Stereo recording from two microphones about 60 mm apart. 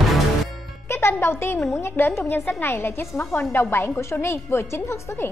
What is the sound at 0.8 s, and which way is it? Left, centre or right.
A woman's voice, left.